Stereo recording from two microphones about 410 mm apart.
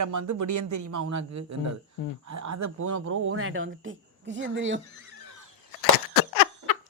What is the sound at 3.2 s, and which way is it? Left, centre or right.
Speech, right.